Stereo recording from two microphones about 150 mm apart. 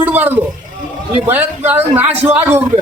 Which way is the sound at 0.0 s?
10° right (ahead or behind).